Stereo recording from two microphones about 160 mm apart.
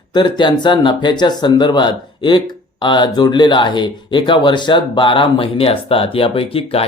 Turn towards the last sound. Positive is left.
turn(degrees=35)  # may be behind; listen again after turning